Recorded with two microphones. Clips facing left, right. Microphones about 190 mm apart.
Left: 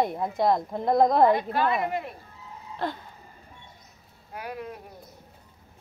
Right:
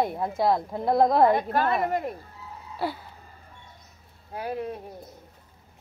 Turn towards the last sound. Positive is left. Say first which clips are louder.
# right 5 dB
turn(degrees=-30)  # may be behind; listen again after turning